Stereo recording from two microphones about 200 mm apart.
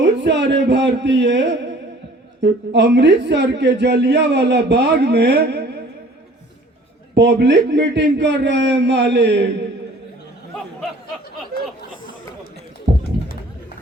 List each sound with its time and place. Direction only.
0.0 s a man's voice: 60° right (ahead or behind)
7.2 s a man's voice: 60° right (ahead or behind)